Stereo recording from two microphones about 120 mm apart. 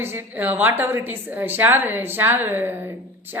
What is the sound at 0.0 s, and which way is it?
A woman's voice, 15° right (ahead or behind).